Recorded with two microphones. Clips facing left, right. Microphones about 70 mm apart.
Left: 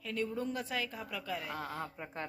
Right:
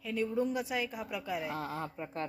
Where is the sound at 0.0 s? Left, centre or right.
Centre.